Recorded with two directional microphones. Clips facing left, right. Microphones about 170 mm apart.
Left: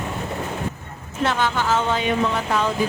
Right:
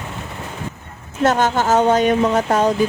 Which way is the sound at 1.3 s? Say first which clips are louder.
Right 6 dB; 45° right (ahead or behind).